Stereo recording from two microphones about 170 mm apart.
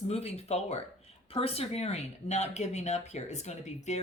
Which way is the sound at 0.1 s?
40° left (ahead or behind).